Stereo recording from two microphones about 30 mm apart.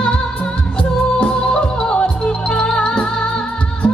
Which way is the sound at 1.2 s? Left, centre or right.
Left.